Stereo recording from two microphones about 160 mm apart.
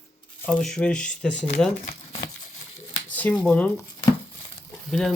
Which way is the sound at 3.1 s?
10° left (ahead or behind).